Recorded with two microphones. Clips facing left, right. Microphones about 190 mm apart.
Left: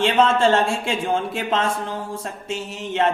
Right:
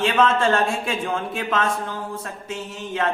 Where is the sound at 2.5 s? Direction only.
75° left (ahead or behind).